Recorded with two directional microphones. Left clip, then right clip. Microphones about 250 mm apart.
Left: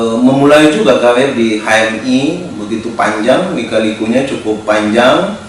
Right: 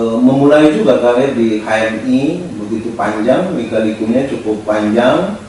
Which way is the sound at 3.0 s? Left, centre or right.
Centre.